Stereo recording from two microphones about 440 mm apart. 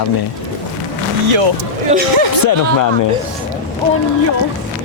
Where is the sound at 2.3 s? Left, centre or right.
Left.